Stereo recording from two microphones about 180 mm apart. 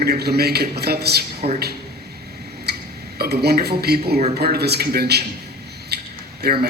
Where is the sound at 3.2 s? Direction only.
60° right (ahead or behind).